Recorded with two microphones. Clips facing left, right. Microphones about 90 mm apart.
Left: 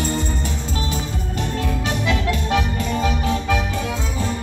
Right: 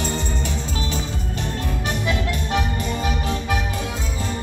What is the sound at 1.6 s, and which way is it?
Music, 30° right (ahead or behind).